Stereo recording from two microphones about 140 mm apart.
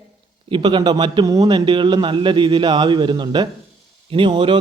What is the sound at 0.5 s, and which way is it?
A man's voice, 35° right (ahead or behind).